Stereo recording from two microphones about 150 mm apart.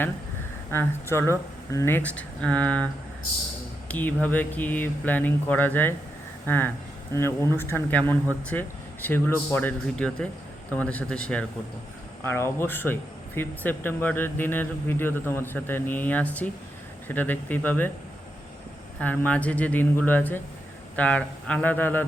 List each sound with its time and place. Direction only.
0.7 s speech: 15° left (ahead or behind)
12.2 s speech: 15° left (ahead or behind)
18.9 s speech: 10° left (ahead or behind)